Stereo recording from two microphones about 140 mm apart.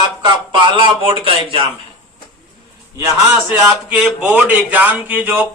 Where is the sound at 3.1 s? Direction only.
10° right (ahead or behind).